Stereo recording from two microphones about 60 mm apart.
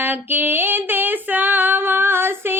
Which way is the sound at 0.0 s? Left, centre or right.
Right.